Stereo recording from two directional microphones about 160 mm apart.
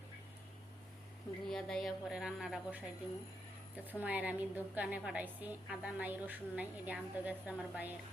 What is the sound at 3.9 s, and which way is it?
A woman's voice, 10° right (ahead or behind).